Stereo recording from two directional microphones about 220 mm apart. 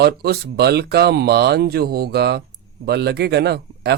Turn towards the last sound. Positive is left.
turn(degrees=-50)  # may be behind; listen again after turning